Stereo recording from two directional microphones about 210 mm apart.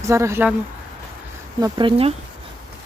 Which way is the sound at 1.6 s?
25° right (ahead or behind).